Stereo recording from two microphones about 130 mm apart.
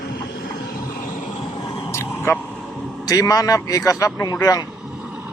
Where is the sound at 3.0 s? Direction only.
25° left (ahead or behind).